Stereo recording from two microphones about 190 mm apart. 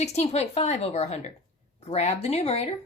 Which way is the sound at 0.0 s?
35° left (ahead or behind).